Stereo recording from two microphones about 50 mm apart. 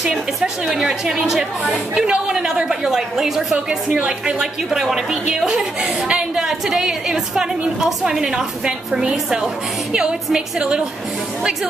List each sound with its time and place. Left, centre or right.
0.1 s a woman's voice: centre
3.5 s a woman's voice: right
6.4 s a woman's voice: centre